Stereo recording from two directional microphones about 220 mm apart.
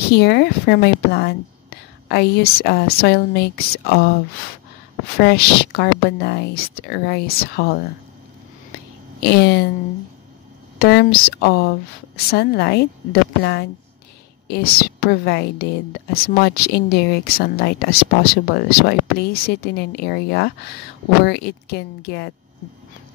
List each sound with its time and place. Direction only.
0.1 s speech: 45° left (ahead or behind)
5.2 s speech: 45° left (ahead or behind)
9.2 s speech: 45° left (ahead or behind)
10.8 s speech: 45° left (ahead or behind)